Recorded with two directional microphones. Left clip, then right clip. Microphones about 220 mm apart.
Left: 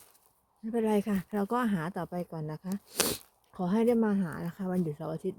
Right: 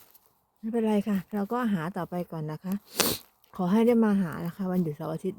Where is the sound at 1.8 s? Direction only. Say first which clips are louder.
Right 3 dB; 15° right (ahead or behind).